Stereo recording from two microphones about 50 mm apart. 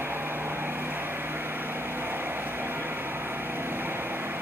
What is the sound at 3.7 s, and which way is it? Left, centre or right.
Vehicle, right.